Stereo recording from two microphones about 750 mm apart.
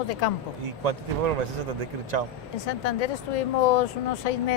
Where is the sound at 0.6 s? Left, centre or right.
Right.